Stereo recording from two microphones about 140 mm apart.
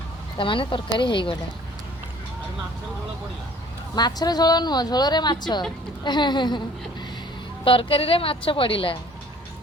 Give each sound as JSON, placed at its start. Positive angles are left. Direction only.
{"t": 0.3, "sound": "a woman's voice", "side_deg": 35}
{"t": 3.9, "sound": "a woman's voice", "side_deg": 30}
{"t": 7.6, "sound": "a woman's voice", "side_deg": 40}